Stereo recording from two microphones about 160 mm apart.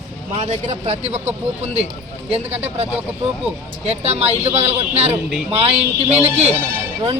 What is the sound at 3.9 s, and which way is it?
A man's voice, 40° right (ahead or behind).